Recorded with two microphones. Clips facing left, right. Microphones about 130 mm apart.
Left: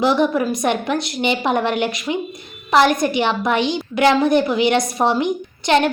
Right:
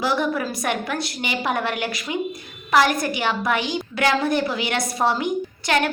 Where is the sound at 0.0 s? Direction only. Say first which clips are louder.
Left 6 dB; 20° left (ahead or behind).